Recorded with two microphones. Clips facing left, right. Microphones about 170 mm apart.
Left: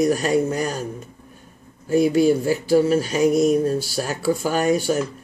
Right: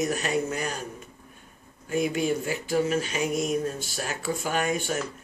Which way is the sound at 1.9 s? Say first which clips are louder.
Left 9 dB; 35° left (ahead or behind).